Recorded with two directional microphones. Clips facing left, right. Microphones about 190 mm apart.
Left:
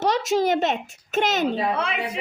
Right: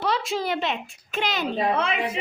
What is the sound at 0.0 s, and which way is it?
A woman's voice, 45° left (ahead or behind).